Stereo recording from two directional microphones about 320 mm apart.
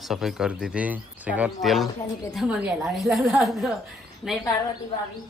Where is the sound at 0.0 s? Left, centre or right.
Centre.